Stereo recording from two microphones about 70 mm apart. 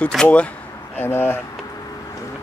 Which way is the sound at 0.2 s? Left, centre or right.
Centre.